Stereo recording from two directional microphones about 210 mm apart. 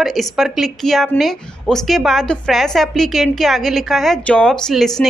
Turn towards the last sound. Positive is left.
turn(degrees=0)  # may be behind; listen again after turning